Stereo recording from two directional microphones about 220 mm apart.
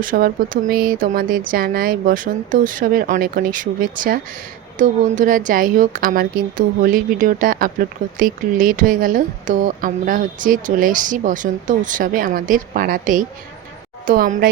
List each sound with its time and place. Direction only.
0.0 s speech: 40° right (ahead or behind)